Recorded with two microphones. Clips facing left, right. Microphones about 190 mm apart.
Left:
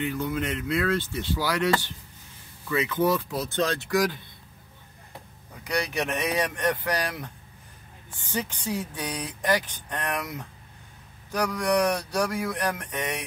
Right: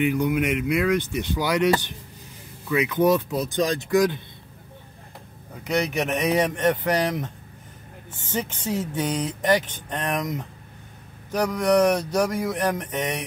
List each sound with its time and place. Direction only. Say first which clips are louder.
0.0 s speech: right 6 dB; 15° right (ahead or behind)
5.6 s speech: right 4 dB; 20° right (ahead or behind)
8.3 s speech: right 3 dB; 25° right (ahead or behind)